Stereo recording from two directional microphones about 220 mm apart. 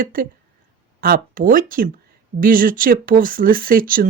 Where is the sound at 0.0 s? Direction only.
40° right (ahead or behind).